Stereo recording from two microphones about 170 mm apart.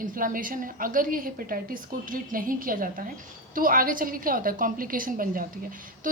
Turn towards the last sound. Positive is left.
turn(degrees=-55)  # may be behind; listen again after turning